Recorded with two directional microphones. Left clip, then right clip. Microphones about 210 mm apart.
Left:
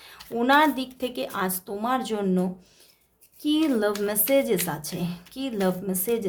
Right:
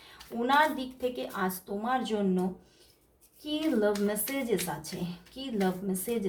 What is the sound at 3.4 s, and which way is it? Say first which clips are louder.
Speech: left 5 dB; 45° left (ahead or behind).